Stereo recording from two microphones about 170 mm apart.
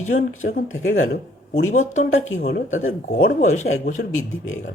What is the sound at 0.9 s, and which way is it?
Speech, 70° left (ahead or behind).